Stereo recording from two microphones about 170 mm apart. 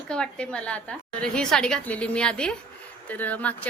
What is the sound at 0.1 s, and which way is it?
A woman's voice, 5° left (ahead or behind).